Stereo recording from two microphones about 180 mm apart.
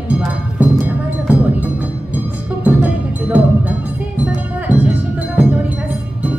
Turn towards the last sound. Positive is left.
turn(degrees=-10)  # may be behind; listen again after turning